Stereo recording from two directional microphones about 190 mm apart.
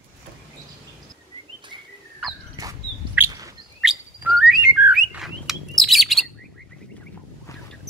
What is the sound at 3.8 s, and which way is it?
Bird, 5° right (ahead or behind).